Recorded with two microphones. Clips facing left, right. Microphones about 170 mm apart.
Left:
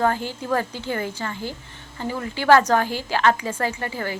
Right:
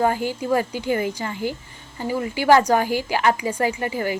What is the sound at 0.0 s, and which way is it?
A woman's voice, 10° right (ahead or behind).